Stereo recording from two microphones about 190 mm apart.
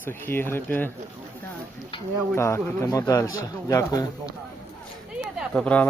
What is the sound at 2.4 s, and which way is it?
A man's voice, 15° left (ahead or behind).